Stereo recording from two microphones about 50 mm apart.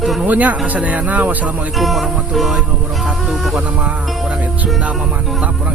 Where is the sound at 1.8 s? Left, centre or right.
Centre.